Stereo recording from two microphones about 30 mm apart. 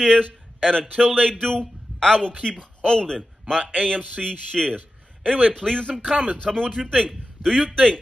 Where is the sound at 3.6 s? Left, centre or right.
Right.